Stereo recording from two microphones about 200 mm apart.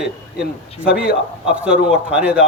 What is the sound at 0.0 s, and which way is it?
A man's voice, 5° right (ahead or behind).